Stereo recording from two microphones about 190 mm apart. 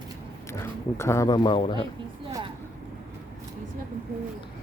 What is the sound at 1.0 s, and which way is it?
Speech, 15° left (ahead or behind).